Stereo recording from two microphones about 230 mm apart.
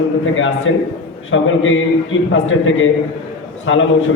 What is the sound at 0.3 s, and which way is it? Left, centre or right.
A man's voice, left.